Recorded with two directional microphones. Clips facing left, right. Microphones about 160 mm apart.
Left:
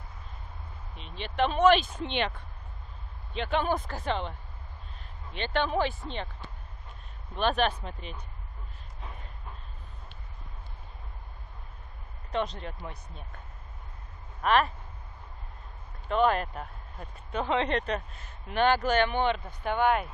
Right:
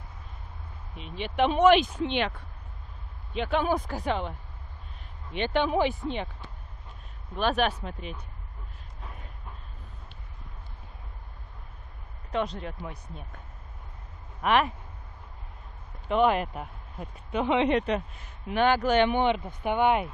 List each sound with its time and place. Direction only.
0.9 s speech: 10° right (ahead or behind)
5.4 s speech: 10° right (ahead or behind)
7.3 s speech: 5° right (ahead or behind)
12.3 s speech: 5° right (ahead or behind)
14.4 s speech: 15° right (ahead or behind)
16.1 s speech: 15° right (ahead or behind)